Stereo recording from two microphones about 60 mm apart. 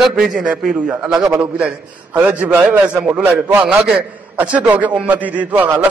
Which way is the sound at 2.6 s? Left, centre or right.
Right.